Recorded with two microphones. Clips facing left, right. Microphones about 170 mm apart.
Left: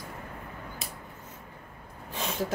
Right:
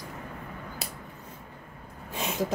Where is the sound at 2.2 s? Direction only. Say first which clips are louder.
Right 2 dB; 15° right (ahead or behind).